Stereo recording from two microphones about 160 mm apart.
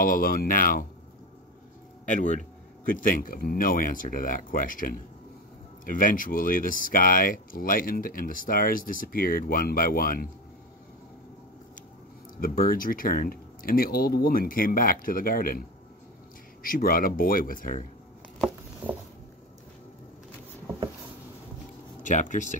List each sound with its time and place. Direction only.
0.0 s speech: 65° left (ahead or behind)
2.0 s speech: 50° left (ahead or behind)
12.4 s speech: 65° left (ahead or behind)
16.6 s speech: 60° left (ahead or behind)
18.8 s a sound: 10° right (ahead or behind)
22.0 s speech: 50° left (ahead or behind)